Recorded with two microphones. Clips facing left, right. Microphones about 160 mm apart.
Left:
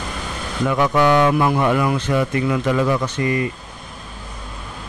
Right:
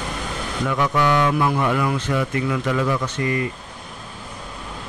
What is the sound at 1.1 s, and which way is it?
Speech, 25° left (ahead or behind).